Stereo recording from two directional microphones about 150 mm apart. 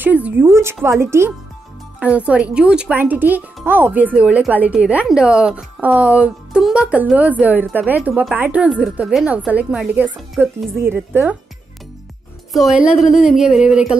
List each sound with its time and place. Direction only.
0.0 s a woman's voice: 10° right (ahead or behind)
12.5 s a woman's voice: 5° right (ahead or behind)